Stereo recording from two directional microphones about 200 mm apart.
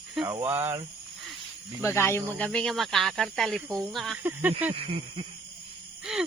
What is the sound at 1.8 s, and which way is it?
Speech, 10° left (ahead or behind).